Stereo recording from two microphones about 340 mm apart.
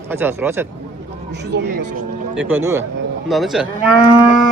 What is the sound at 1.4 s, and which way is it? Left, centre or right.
Speech, right.